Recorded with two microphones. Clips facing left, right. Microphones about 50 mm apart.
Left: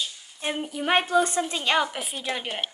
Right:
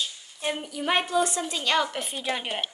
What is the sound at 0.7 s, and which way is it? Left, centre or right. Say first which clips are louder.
A woman's voice: left 4 dB; left.